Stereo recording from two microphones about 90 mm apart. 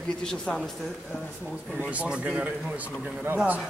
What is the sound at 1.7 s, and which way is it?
A man's voice, 15° right (ahead or behind).